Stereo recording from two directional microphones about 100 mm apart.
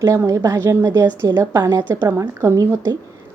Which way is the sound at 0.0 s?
35° right (ahead or behind).